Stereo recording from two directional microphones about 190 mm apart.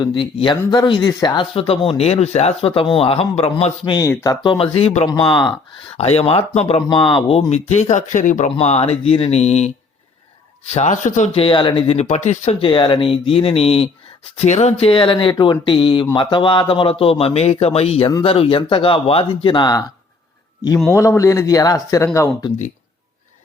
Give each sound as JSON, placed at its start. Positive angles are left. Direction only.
{"t": 0.0, "sound": "speech", "side_deg": 25}
{"t": 3.9, "sound": "speech", "side_deg": 15}
{"t": 10.8, "sound": "speech", "side_deg": 40}
{"t": 20.9, "sound": "speech", "side_deg": 15}